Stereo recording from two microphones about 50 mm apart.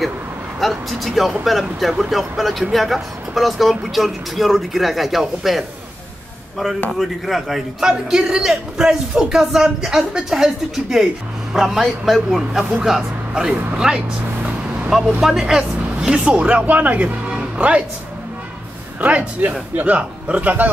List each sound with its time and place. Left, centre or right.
0.6 s speech: centre
6.9 s a man's voice: centre
16.3 s speech: right
18.9 s a man's voice: right